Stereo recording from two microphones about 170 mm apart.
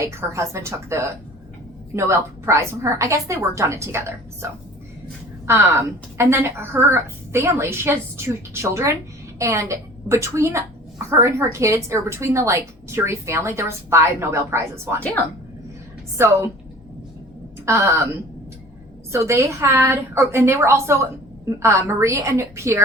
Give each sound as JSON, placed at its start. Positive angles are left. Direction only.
{"t": 0.0, "sound": "a woman's voice", "side_deg": -15}
{"t": 16.1, "sound": "a woman's voice", "side_deg": -15}
{"t": 17.7, "sound": "a woman's voice", "side_deg": -15}
{"t": 19.1, "sound": "a woman's voice", "side_deg": -15}